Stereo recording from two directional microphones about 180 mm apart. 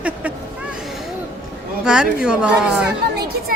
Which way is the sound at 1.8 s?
5° right (ahead or behind).